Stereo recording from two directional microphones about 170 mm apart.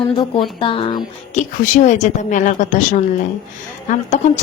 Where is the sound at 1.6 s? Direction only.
45° left (ahead or behind).